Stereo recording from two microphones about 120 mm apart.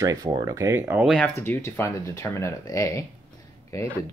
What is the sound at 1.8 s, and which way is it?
Speech, 25° left (ahead or behind).